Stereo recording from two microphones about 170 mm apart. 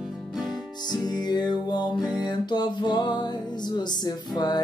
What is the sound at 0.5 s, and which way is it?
Music, 25° left (ahead or behind).